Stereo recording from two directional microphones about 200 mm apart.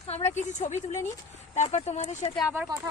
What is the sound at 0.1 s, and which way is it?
Speech, 30° left (ahead or behind).